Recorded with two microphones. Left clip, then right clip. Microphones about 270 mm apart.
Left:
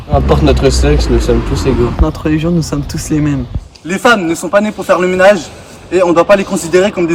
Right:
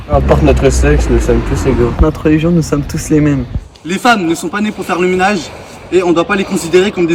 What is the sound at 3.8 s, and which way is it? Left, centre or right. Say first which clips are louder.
A man's voice: left 1 dB; centre.